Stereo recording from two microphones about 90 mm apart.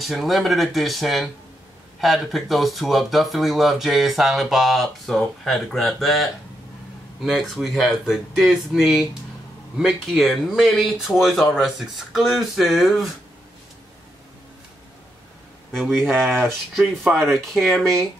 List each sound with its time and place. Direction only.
0.0 s speech: centre (ahead or behind)
7.2 s speech: centre (ahead or behind)
15.7 s speech: centre (ahead or behind)
16.1 s speech: 20° right (ahead or behind)
16.4 s speech: centre (ahead or behind)